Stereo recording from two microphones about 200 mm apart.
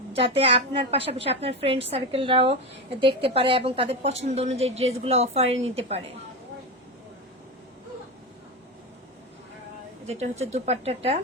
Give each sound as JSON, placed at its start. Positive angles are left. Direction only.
{"t": 0.2, "sound": "a woman's voice", "side_deg": -30}
{"t": 10.1, "sound": "a woman's voice", "side_deg": -30}